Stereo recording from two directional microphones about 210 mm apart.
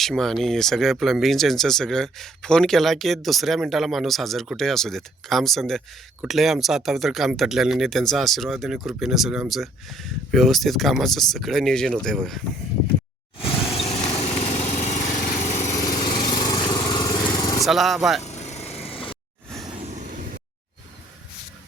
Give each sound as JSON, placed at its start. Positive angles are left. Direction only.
{"t": 0.0, "sound": "speech", "side_deg": 0}
{"t": 13.4, "sound": "lawn mower", "side_deg": 25}
{"t": 15.7, "sound": "lawn mower", "side_deg": 15}
{"t": 17.7, "sound": "speech", "side_deg": 0}
{"t": 18.2, "sound": "vehicle", "side_deg": 30}